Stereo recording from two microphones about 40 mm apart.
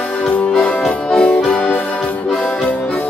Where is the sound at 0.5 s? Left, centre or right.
Left.